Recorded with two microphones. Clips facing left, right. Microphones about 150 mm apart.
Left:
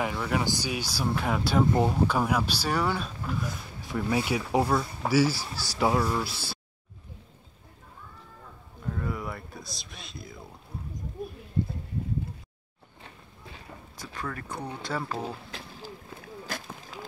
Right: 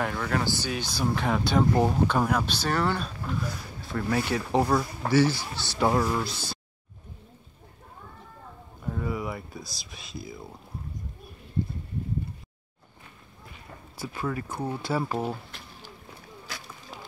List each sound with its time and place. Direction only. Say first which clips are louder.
0.0 s speech: even; 5° left (ahead or behind)
3.4 s speech: right 1 dB; 15° left (ahead or behind)
5.4 s speech: right 1 dB; 35° left (ahead or behind)
5.8 s speech: right 1 dB; 5° left (ahead or behind)
8.8 s a sound: right 2 dB; 5° right (ahead or behind)
13.9 s speech: right 6 dB; 10° right (ahead or behind)
16.4 s a sound: left 5 dB; 50° left (ahead or behind)